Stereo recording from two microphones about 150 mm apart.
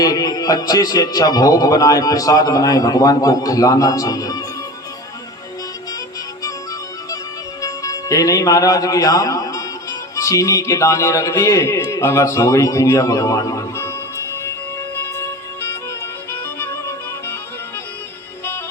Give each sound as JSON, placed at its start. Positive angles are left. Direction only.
{"t": 0.0, "sound": "a man's voice", "side_deg": 25}
{"t": 7.6, "sound": "speech", "side_deg": 25}
{"t": 16.6, "sound": "music", "side_deg": 15}